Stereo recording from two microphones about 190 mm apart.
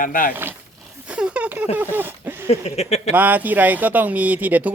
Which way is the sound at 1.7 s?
10° right (ahead or behind).